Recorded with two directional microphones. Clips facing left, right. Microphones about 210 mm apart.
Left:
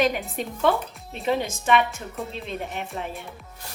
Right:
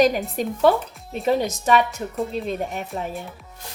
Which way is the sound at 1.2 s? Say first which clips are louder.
Right 4 dB; 40° right (ahead or behind).